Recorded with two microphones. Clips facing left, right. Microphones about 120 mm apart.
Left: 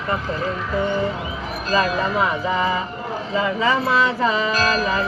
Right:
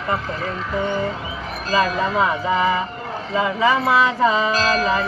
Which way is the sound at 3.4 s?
20° right (ahead or behind).